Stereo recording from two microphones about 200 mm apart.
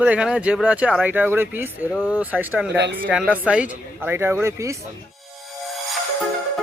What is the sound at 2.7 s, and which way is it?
Speech, 60° right (ahead or behind).